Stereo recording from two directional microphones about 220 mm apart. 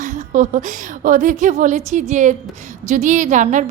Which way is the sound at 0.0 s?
35° right (ahead or behind).